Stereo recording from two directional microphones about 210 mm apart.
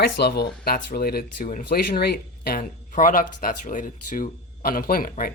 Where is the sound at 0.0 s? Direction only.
50° left (ahead or behind).